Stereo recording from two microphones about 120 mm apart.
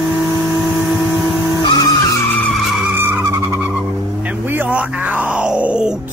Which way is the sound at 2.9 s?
20° right (ahead or behind).